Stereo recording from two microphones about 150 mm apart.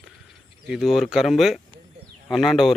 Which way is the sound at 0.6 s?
5° right (ahead or behind).